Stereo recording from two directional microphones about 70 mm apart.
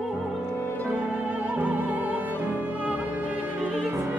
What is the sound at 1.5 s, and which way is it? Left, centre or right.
Music, right.